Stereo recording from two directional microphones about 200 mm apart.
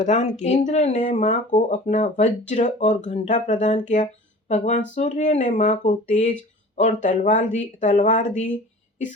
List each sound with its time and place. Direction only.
0.0 s speech: 35° left (ahead or behind)